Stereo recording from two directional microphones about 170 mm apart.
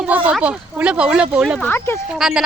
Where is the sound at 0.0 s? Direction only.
5° right (ahead or behind).